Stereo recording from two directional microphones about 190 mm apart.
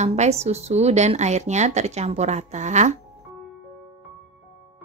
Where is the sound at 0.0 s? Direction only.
35° right (ahead or behind).